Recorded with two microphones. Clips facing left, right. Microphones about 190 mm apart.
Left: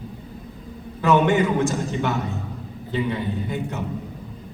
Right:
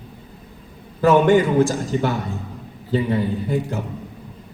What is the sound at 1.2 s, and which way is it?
A man's voice, 35° right (ahead or behind).